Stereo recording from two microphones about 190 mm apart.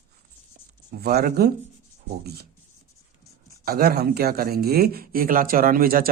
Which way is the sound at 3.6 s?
55° right (ahead or behind).